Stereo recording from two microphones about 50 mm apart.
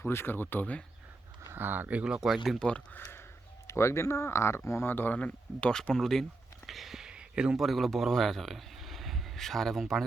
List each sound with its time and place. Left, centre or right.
0.0 s speech: left
1.5 s speech: right
1.9 s speech: right
2.2 s speech: centre
3.7 s speech: left
4.9 s speech: left
5.1 s speech: left
5.9 s speech: centre
6.7 s a sound: centre
7.0 s a sound: centre
7.6 s speech: centre